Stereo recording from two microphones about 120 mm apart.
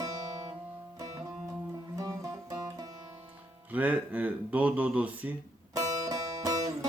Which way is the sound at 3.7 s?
10° right (ahead or behind).